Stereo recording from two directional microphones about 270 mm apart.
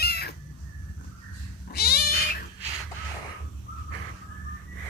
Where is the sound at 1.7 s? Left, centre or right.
Left.